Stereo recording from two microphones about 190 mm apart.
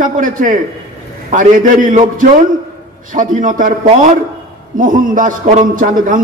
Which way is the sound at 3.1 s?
45° right (ahead or behind).